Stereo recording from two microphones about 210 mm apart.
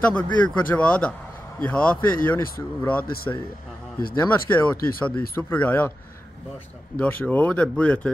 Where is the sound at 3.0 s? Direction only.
45° left (ahead or behind).